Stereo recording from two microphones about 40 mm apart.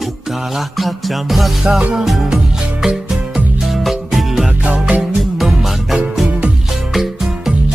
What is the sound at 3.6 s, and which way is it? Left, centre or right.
Music, centre.